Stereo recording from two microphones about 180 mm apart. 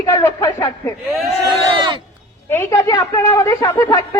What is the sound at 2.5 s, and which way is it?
A woman's voice, 10° left (ahead or behind).